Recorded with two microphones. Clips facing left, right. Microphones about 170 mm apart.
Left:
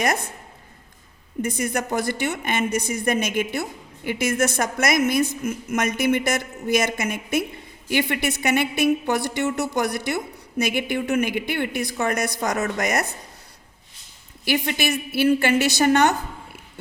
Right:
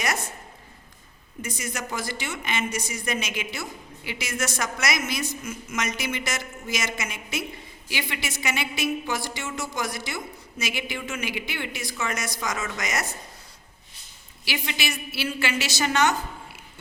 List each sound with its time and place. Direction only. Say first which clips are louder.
0.0 s a woman's voice: left 5 dB; 55° left (ahead or behind)
1.4 s a woman's voice: left 9 dB; 55° left (ahead or behind)
14.4 s a woman's voice: left 8 dB; 50° left (ahead or behind)